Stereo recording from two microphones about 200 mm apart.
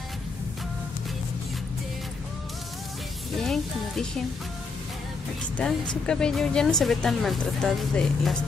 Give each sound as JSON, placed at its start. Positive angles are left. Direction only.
{"t": 3.3, "sound": "speech", "side_deg": 0}
{"t": 5.6, "sound": "speech", "side_deg": 5}